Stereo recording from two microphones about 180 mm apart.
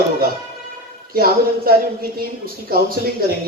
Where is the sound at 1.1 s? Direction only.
55° right (ahead or behind).